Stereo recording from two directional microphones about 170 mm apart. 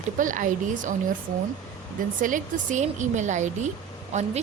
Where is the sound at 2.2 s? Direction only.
50° right (ahead or behind).